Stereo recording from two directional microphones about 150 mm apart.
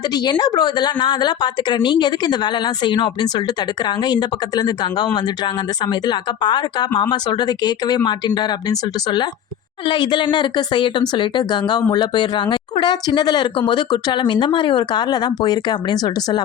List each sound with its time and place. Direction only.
0.1 s a woman's voice: 25° left (ahead or behind)